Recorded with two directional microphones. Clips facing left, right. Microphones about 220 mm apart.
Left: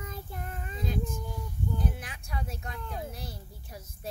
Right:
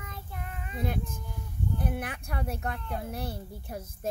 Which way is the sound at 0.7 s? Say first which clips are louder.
Right 1 dB; 60° right (ahead or behind).